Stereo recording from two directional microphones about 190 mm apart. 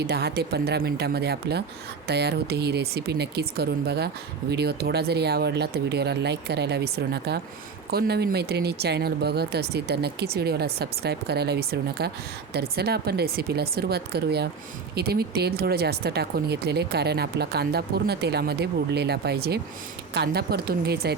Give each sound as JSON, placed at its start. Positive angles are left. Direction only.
{"t": 0.0, "sound": "speech", "side_deg": -60}